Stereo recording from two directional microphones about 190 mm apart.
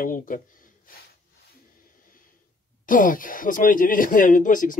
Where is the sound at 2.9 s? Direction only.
45° left (ahead or behind).